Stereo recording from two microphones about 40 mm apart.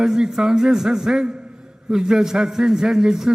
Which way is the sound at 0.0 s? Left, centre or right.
Centre.